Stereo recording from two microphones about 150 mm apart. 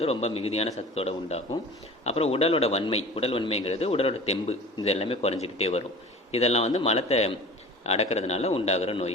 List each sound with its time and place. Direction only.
0.0 s a man's voice: 45° left (ahead or behind)